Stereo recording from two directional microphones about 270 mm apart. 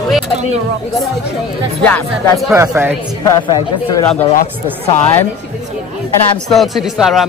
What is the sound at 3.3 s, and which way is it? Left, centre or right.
Speech, centre.